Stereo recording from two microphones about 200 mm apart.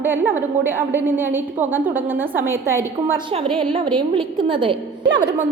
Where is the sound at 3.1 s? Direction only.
25° right (ahead or behind).